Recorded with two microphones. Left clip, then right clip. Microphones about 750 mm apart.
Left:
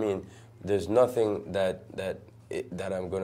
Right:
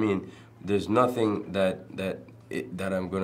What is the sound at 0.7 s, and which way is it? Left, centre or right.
Speech, left.